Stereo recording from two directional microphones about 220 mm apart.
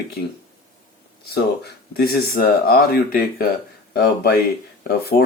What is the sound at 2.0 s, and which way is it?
Speech, 45° left (ahead or behind).